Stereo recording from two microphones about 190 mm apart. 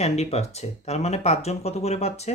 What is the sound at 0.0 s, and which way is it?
Speech, 35° left (ahead or behind).